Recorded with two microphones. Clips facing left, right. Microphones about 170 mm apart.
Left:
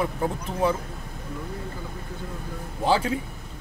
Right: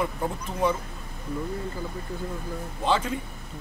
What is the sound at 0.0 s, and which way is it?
Speech, 5° left (ahead or behind).